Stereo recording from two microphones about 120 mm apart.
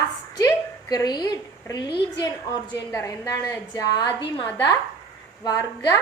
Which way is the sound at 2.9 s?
25° left (ahead or behind).